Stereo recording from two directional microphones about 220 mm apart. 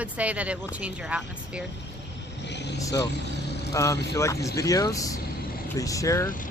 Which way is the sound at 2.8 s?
15° left (ahead or behind).